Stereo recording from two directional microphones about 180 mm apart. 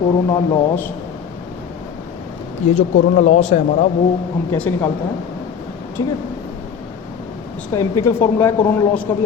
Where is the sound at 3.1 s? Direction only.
40° left (ahead or behind).